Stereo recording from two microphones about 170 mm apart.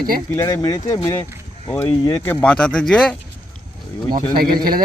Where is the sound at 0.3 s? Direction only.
20° left (ahead or behind).